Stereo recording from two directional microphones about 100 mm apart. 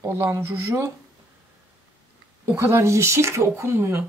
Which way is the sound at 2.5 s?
30° right (ahead or behind).